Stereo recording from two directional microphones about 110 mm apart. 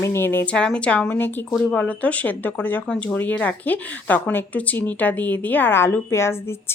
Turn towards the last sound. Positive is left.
turn(degrees=25)  # may be behind; listen again after turning